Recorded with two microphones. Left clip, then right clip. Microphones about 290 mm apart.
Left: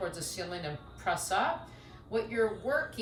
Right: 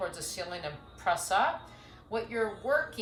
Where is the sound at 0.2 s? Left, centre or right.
Centre.